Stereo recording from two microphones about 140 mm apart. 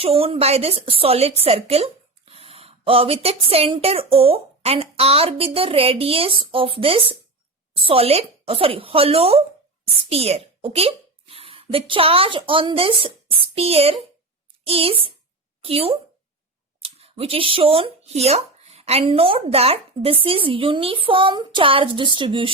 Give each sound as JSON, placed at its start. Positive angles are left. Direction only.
{"t": 0.0, "sound": "a woman's voice", "side_deg": -45}